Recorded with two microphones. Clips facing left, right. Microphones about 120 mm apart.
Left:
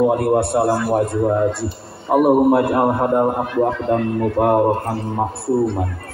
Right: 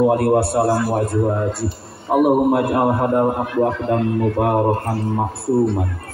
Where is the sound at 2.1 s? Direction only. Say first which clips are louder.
Left 2 dB; 25° left (ahead or behind).